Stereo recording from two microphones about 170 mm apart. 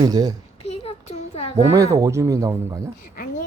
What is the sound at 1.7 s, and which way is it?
Speech, 20° right (ahead or behind).